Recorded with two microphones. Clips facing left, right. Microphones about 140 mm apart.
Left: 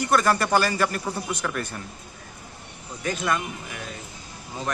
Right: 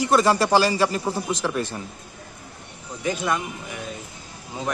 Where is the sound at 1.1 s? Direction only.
25° right (ahead or behind).